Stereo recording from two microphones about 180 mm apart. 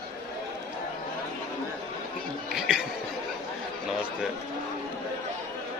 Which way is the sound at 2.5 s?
5° right (ahead or behind).